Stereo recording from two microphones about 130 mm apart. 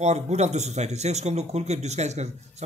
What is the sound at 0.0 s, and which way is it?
A man's voice, 60° right (ahead or behind).